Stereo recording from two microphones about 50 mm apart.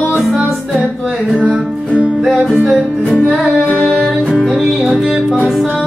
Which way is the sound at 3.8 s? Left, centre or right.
Centre.